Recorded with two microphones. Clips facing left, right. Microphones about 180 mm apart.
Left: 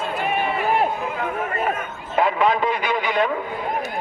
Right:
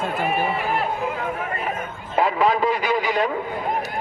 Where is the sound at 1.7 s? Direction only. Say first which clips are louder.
Even; 35° right (ahead or behind).